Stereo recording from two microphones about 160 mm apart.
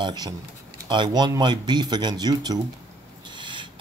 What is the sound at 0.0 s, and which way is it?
Speech, 25° right (ahead or behind).